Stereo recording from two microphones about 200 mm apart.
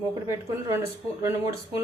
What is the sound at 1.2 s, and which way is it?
Speech, 15° right (ahead or behind).